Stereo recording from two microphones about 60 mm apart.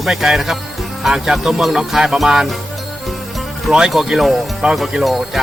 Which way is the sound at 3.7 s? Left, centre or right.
Centre.